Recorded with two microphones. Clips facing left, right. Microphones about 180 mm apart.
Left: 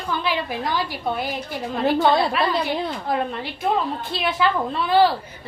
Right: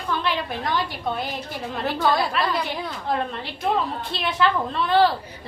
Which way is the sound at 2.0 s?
25° left (ahead or behind).